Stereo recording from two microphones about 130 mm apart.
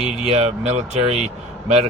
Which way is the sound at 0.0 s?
50° right (ahead or behind).